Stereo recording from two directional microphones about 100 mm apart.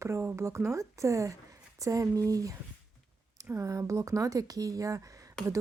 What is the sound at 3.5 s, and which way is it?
A woman's voice, 35° right (ahead or behind).